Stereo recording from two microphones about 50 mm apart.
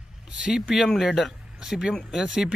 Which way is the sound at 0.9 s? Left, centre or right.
Centre.